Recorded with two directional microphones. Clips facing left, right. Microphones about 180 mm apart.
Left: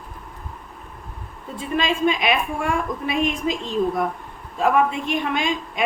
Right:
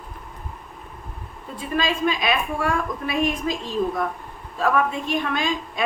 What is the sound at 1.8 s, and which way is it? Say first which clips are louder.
A woman's voice: left 2 dB; 25° left (ahead or behind).